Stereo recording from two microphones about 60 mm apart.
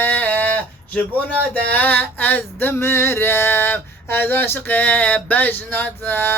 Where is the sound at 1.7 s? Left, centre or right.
Left.